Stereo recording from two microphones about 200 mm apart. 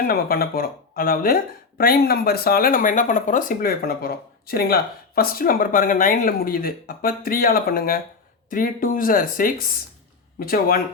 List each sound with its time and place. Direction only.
0.1 s speech: 50° left (ahead or behind)